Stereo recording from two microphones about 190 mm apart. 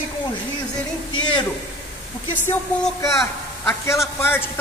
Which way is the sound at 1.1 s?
25° left (ahead or behind).